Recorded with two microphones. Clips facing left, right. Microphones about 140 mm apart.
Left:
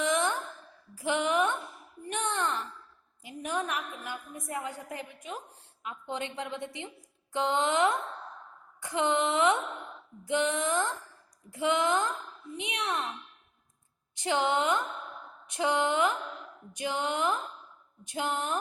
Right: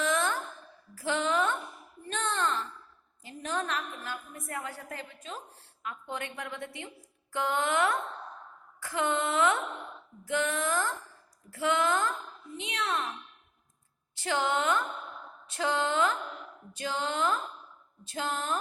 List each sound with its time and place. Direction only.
0.0 s a sound: 15° left (ahead or behind)
3.2 s a woman's voice: 15° left (ahead or behind)
14.2 s speech: 20° left (ahead or behind)